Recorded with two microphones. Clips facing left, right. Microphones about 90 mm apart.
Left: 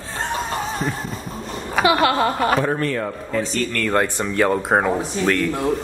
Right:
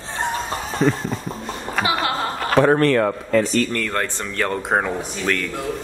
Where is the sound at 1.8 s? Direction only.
5° left (ahead or behind).